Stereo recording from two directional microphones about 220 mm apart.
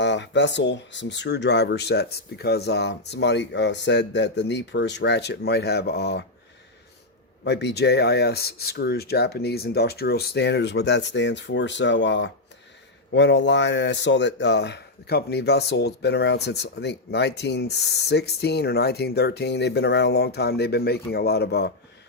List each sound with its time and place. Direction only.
0.0 s speech: 55° left (ahead or behind)
7.4 s speech: 50° left (ahead or behind)